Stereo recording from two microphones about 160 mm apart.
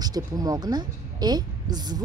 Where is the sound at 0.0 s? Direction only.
25° right (ahead or behind).